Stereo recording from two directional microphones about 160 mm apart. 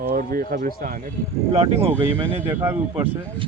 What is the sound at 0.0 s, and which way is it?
Speech, 65° right (ahead or behind).